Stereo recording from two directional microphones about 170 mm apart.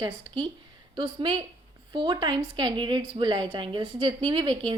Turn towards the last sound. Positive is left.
turn(degrees=-30)  # may be behind; listen again after turning